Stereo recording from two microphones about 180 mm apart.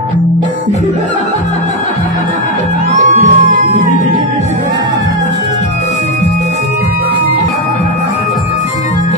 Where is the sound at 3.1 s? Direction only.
45° right (ahead or behind).